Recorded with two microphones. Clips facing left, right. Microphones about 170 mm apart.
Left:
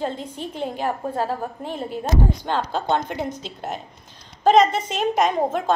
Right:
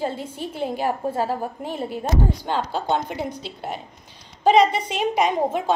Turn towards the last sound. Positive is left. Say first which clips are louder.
# even
turn(degrees=-15)  # may be behind; listen again after turning